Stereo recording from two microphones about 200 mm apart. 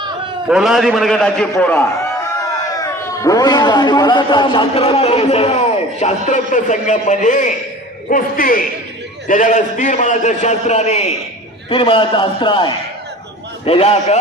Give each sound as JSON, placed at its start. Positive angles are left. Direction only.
{"t": 0.4, "sound": "a man's voice", "side_deg": 0}